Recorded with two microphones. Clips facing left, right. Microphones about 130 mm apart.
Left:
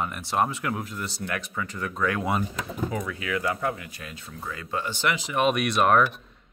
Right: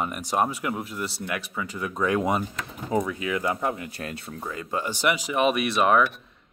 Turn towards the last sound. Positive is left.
turn(degrees=-5)  # may be behind; listen again after turning